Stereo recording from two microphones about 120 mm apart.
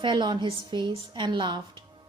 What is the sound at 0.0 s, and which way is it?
A woman's voice, 40° right (ahead or behind).